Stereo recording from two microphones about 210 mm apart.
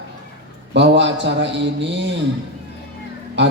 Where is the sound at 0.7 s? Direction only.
55° right (ahead or behind).